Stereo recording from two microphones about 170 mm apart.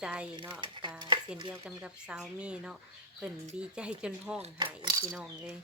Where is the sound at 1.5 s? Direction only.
5° right (ahead or behind).